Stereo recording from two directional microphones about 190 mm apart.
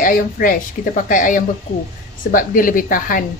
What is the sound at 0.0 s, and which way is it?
A woman's voice, 45° left (ahead or behind).